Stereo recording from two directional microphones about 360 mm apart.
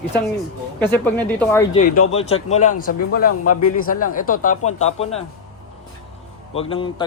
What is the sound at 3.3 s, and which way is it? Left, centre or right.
Speech, left.